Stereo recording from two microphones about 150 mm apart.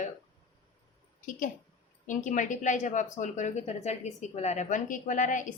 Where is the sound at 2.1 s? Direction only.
55° left (ahead or behind).